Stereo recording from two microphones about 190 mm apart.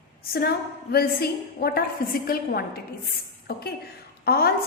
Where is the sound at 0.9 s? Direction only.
55° left (ahead or behind).